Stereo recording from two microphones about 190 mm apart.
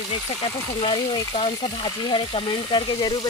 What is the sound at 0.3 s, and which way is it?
Speech, 20° left (ahead or behind).